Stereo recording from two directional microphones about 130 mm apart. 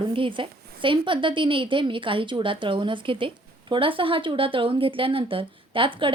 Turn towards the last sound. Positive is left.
turn(degrees=-40)  # may be behind; listen again after turning